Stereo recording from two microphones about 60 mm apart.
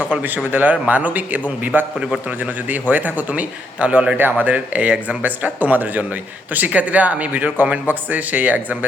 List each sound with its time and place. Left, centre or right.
0.5 s a man's voice: right
4.2 s a man's voice: right